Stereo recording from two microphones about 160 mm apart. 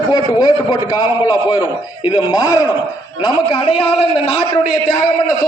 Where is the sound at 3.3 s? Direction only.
35° left (ahead or behind).